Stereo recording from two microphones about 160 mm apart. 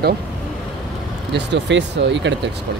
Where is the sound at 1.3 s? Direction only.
90° right.